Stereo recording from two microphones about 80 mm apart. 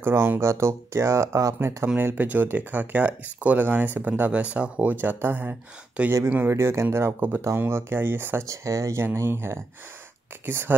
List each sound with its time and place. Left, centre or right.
0.0 s speech: right
2.0 s speech: right
8.5 s speech: right